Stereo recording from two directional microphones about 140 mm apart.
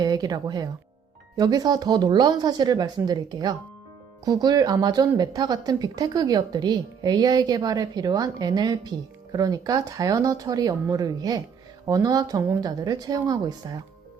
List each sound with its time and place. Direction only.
0.0 s speech: 30° right (ahead or behind)